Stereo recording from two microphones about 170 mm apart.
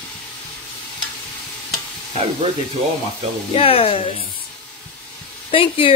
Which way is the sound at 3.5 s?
35° left (ahead or behind).